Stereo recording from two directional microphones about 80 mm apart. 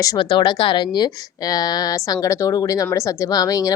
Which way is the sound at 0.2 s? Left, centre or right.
Left.